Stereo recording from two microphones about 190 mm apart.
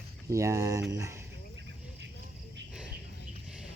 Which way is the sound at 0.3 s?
15° right (ahead or behind).